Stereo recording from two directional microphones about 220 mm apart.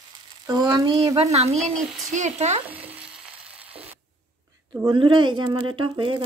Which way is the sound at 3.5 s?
25° right (ahead or behind).